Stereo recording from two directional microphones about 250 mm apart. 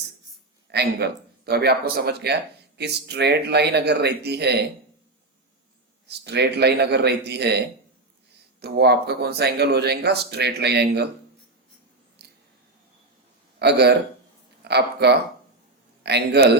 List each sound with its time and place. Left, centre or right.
0.7 s speech: right
6.1 s speech: right
8.6 s speech: right
13.6 s speech: right